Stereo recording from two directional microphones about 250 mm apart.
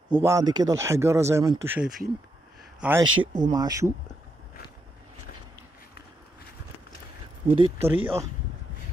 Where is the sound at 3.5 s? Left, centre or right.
Centre.